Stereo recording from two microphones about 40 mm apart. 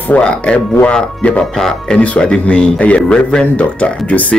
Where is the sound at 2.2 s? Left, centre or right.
Left.